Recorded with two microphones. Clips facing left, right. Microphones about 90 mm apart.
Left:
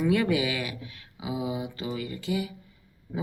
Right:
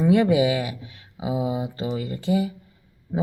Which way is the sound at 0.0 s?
25° right (ahead or behind).